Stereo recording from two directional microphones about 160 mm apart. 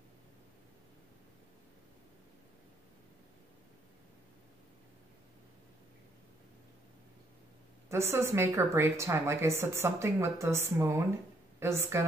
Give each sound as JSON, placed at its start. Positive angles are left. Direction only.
{"t": 7.9, "sound": "speech", "side_deg": -15}